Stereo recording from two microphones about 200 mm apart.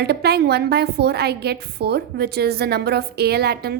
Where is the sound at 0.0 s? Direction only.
55° right (ahead or behind).